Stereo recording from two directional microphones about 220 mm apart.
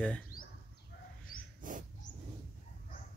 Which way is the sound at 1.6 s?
35° right (ahead or behind).